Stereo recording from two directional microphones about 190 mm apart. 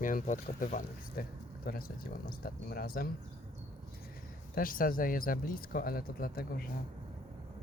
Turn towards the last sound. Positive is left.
turn(degrees=50)  # may be behind; listen again after turning